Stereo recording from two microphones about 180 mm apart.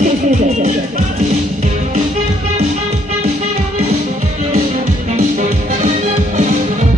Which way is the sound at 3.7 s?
35° right (ahead or behind).